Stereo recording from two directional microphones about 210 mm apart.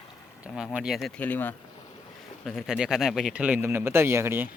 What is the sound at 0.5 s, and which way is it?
Speech, centre (ahead or behind).